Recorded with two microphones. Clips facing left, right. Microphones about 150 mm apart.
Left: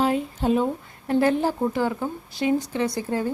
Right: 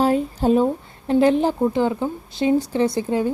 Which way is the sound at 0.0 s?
40° right (ahead or behind).